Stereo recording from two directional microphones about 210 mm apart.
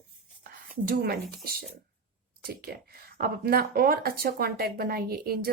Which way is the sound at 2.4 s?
45° right (ahead or behind).